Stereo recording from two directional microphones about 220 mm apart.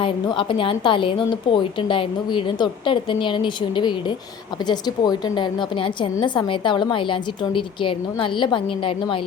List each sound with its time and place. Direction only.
0.0 s a woman's voice: 20° left (ahead or behind)